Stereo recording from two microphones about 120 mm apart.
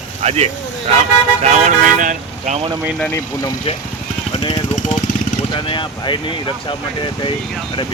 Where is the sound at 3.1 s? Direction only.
20° left (ahead or behind).